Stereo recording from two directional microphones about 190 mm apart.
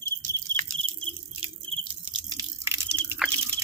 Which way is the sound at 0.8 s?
30° right (ahead or behind).